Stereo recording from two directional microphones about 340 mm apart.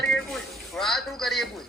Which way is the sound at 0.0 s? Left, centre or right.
Centre.